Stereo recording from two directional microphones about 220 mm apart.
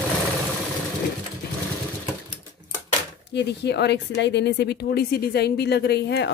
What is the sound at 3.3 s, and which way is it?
Speech, 50° left (ahead or behind).